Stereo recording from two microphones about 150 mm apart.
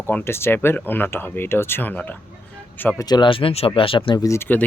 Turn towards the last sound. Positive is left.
turn(degrees=15)  # may be behind; listen again after turning